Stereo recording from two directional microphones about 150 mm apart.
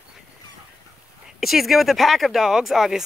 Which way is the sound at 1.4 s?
Centre (ahead or behind).